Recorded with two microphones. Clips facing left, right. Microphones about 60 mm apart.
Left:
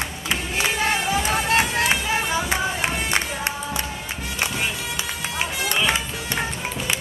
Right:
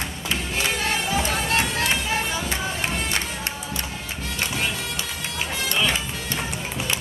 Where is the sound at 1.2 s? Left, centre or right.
Centre.